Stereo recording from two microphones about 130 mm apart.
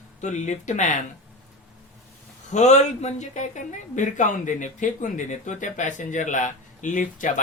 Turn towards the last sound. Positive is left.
turn(degrees=85)